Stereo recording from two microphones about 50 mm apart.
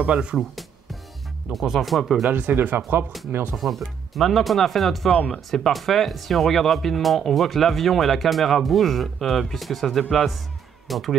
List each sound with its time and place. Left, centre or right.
0.0 s speech: right
0.4 s music: centre
1.5 s speech: centre
2.5 s speech: right
3.5 s speech: centre